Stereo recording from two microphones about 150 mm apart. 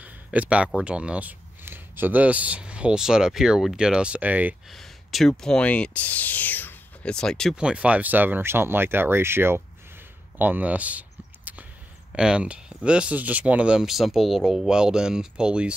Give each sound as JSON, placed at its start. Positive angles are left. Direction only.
{"t": 0.0, "sound": "speech", "side_deg": -10}
{"t": 4.6, "sound": "speech", "side_deg": 0}
{"t": 7.5, "sound": "speech", "side_deg": -5}
{"t": 10.3, "sound": "a sound", "side_deg": -10}
{"t": 12.1, "sound": "speech", "side_deg": -5}